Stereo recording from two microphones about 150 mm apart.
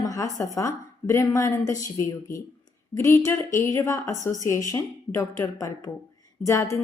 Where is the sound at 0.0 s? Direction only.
20° left (ahead or behind).